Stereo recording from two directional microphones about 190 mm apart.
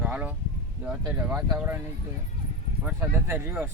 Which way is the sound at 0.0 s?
5° right (ahead or behind).